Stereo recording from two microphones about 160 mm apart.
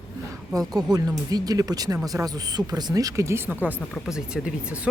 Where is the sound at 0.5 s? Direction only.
20° right (ahead or behind).